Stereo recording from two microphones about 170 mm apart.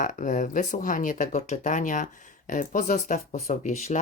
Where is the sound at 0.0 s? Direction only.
50° left (ahead or behind).